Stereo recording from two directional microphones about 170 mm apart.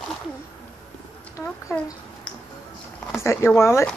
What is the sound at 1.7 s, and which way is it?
Speech, 15° left (ahead or behind).